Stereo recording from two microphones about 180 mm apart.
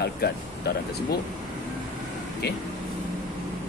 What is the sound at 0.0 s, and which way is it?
Speech, 60° left (ahead or behind).